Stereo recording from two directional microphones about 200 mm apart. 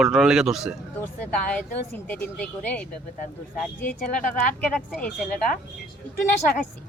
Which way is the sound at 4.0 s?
40° left (ahead or behind).